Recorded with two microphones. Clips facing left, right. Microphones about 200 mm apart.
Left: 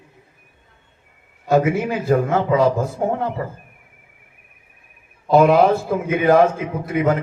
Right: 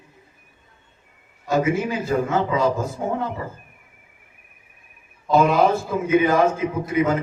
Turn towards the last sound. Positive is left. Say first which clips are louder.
# left 1 dB
turn(degrees=60)  # may be behind; listen again after turning